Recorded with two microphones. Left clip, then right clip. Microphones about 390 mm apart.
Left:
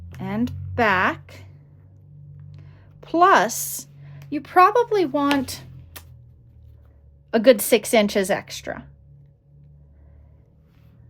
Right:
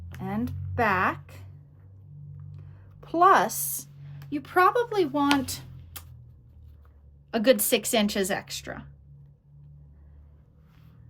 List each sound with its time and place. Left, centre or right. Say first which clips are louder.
0.2 s speech: left 5 dB; left
2.5 s music: left 3 dB; left
3.0 s speech: left 4 dB; left
5.5 s a sound: left 2 dB; centre
7.3 s speech: left 7 dB; centre